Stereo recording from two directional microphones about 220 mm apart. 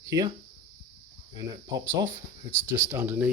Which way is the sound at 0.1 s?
20° right (ahead or behind).